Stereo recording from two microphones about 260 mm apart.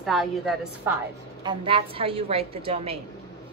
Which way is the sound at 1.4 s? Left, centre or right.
Centre.